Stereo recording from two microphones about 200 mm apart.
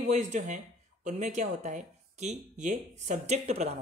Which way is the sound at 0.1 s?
35° right (ahead or behind).